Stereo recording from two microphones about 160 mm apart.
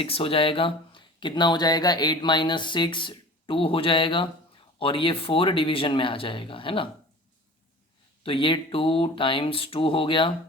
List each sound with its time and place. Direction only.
0.0 s speech: 35° left (ahead or behind)
8.2 s speech: 35° left (ahead or behind)